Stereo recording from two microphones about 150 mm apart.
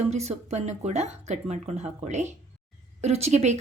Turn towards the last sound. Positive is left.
turn(degrees=-50)  # may be behind; listen again after turning